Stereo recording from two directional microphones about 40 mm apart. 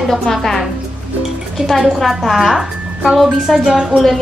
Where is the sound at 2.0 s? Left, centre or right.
Centre.